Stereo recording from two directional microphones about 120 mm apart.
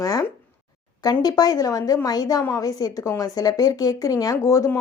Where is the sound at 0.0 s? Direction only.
30° left (ahead or behind).